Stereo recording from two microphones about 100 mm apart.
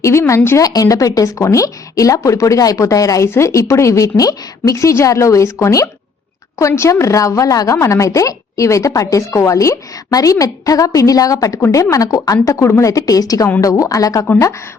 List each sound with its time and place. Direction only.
0.0 s a woman's voice: 30° left (ahead or behind)